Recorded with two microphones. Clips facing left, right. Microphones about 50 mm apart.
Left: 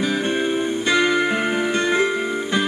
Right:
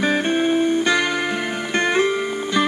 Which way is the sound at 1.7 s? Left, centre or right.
Right.